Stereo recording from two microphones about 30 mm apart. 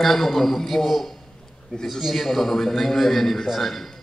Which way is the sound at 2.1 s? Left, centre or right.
Centre.